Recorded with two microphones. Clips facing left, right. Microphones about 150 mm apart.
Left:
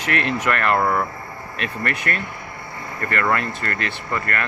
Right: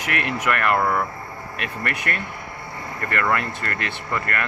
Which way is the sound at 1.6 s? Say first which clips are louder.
Left 3 dB; 15° right (ahead or behind).